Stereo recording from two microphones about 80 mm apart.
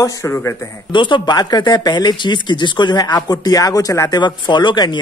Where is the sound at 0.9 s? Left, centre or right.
Left.